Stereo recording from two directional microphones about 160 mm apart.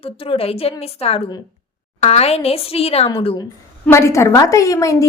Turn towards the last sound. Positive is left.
turn(degrees=20)  # may be behind; listen again after turning